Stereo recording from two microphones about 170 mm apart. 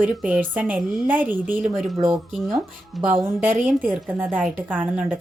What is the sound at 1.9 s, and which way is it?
Speech, 30° right (ahead or behind).